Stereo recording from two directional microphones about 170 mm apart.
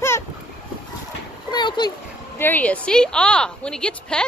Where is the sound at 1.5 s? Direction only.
25° left (ahead or behind).